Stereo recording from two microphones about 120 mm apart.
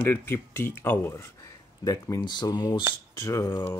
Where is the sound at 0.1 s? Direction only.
20° left (ahead or behind).